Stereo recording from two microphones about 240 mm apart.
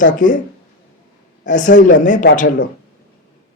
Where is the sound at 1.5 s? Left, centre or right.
Left.